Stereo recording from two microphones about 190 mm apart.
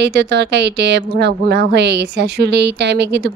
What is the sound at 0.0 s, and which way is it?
A woman's voice, 60° right (ahead or behind).